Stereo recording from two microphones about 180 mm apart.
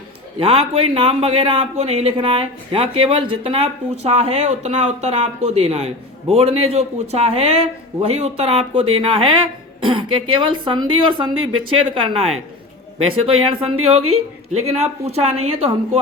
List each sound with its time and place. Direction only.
0.3 s a man's voice: 30° right (ahead or behind)